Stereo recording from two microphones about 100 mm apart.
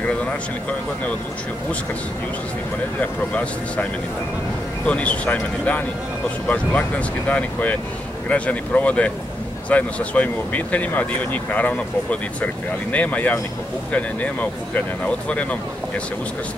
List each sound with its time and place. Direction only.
0.0 s speech: 15° left (ahead or behind)
3.0 s speech: 15° left (ahead or behind)
4.8 s speech: 10° left (ahead or behind)